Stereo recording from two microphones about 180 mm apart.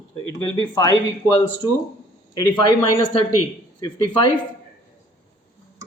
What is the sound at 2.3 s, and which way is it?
Speech, 20° left (ahead or behind).